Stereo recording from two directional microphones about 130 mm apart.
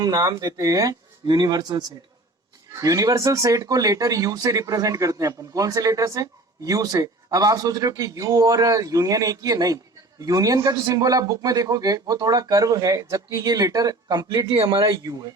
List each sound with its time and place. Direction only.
0.0 s speech: 30° right (ahead or behind)